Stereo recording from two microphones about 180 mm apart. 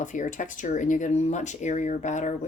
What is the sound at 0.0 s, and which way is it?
Speech, 45° left (ahead or behind).